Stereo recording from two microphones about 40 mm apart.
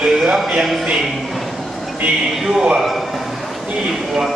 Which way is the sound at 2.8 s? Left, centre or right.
Centre.